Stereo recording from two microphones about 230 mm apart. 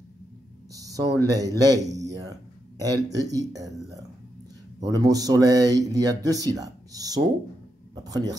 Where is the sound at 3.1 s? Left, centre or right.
Centre.